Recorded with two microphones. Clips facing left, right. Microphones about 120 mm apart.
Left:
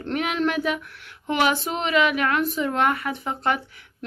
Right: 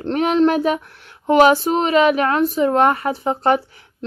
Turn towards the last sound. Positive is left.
turn(degrees=-35)  # may be behind; listen again after turning